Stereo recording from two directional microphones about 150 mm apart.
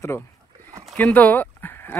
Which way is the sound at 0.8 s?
5° left (ahead or behind).